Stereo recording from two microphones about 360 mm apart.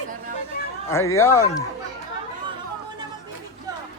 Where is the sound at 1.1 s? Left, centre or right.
Centre.